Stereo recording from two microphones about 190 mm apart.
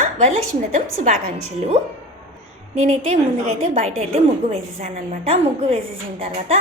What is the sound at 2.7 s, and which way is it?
A woman's voice, 40° right (ahead or behind).